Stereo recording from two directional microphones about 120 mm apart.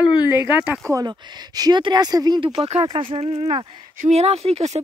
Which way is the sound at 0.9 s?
35° right (ahead or behind).